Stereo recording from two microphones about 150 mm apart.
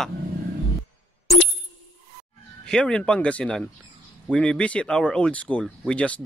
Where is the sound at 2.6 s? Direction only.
5° left (ahead or behind).